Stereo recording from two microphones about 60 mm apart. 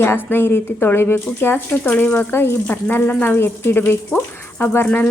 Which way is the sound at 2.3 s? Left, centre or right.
Left.